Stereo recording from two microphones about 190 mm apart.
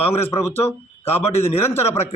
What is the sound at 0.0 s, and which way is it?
Speech, 35° left (ahead or behind).